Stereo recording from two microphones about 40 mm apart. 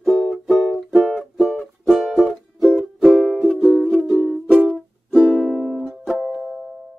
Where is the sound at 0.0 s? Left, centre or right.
Centre.